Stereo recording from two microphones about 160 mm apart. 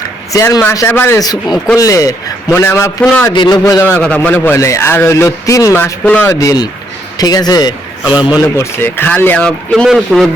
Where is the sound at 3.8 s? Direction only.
10° left (ahead or behind).